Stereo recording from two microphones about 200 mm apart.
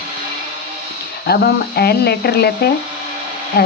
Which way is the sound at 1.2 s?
50° left (ahead or behind).